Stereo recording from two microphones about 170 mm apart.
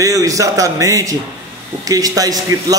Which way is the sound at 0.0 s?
20° right (ahead or behind).